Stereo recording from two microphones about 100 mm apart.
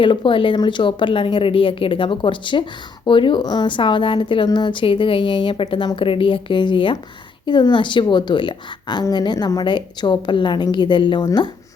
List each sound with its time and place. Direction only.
0.0 s a woman's voice: 55° left (ahead or behind)